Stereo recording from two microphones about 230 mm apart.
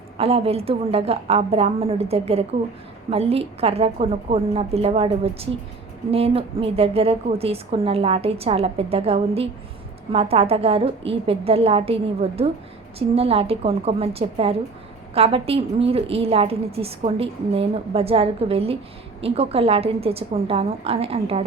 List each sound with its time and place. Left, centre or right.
0.2 s a woman's voice: right